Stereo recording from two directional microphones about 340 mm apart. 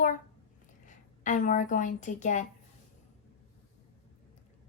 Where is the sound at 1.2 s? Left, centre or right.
Left.